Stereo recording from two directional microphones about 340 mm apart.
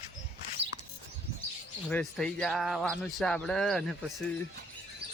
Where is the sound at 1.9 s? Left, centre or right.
Centre.